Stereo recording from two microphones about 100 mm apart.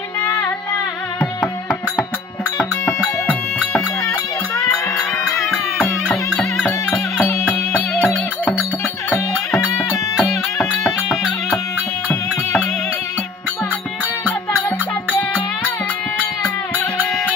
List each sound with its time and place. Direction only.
2.8 s music: 10° left (ahead or behind)
5.4 s music: 5° left (ahead or behind)
10.2 s music: centre (ahead or behind)
16.4 s music: 15° left (ahead or behind)